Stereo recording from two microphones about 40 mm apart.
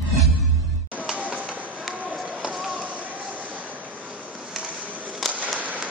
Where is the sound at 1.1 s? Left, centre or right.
Right.